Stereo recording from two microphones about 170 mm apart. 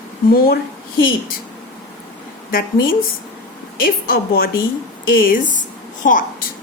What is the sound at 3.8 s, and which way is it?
A woman's voice, 60° left (ahead or behind).